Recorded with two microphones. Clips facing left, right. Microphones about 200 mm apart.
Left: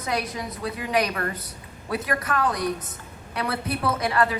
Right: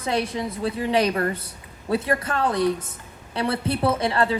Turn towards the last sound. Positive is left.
turn(degrees=-30)  # may be behind; listen again after turning